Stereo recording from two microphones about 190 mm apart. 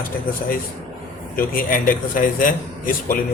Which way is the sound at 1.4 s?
45° left (ahead or behind).